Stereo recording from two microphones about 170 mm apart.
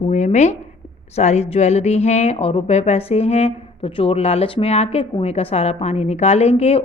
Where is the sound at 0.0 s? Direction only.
45° left (ahead or behind).